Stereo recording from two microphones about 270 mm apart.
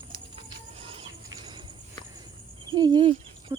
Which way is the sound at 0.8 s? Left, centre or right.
Right.